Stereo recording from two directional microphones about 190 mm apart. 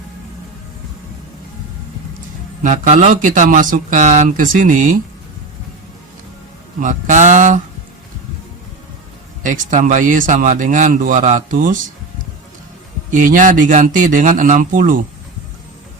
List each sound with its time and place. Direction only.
2.6 s speech: 40° right (ahead or behind)
6.7 s speech: 40° right (ahead or behind)
9.4 s speech: 40° right (ahead or behind)
13.1 s speech: 45° right (ahead or behind)